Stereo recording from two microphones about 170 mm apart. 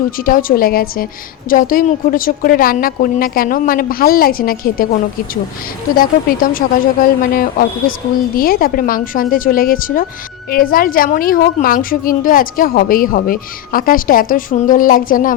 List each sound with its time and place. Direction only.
0.2 s a woman's voice: 55° left (ahead or behind)